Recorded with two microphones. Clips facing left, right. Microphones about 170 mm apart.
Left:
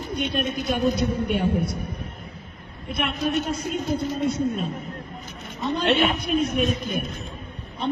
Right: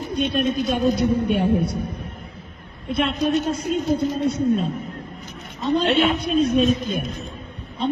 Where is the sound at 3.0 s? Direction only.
20° right (ahead or behind).